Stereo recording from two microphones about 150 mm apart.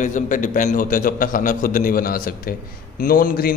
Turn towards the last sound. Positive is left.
turn(degrees=70)  # may be behind; listen again after turning